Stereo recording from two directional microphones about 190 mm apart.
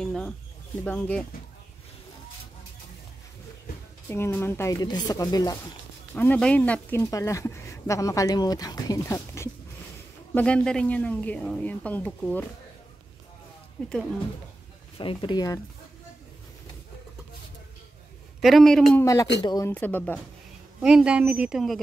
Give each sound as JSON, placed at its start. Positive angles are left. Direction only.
{"t": 0.0, "sound": "bird", "side_deg": 5}
{"t": 0.8, "sound": "speech", "side_deg": 5}
{"t": 4.1, "sound": "speech", "side_deg": 10}
{"t": 6.1, "sound": "speech", "side_deg": 10}
{"t": 15.0, "sound": "speech", "side_deg": 25}
{"t": 18.4, "sound": "a woman's voice", "side_deg": 0}
{"t": 18.9, "sound": "speech", "side_deg": 15}
{"t": 20.8, "sound": "a woman's voice", "side_deg": -5}